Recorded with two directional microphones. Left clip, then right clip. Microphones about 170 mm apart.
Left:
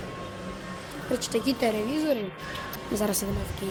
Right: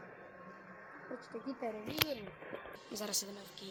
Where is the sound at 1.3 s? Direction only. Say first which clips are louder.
Left 17 dB; 15° left (ahead or behind).